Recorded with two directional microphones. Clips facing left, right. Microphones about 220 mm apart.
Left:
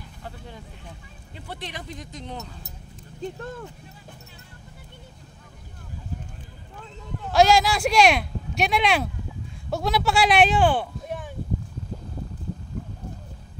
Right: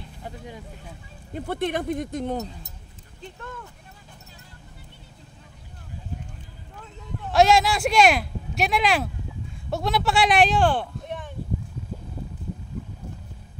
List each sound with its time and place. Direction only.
0.2 s speech: 10° right (ahead or behind)
1.3 s speech: 55° right (ahead or behind)
3.2 s speech: 35° left (ahead or behind)
7.2 s speech: centre (ahead or behind)